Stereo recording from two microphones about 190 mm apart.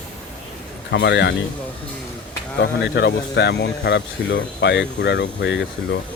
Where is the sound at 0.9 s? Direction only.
65° left (ahead or behind).